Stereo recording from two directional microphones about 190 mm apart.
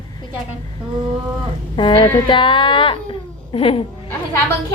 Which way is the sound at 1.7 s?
25° left (ahead or behind).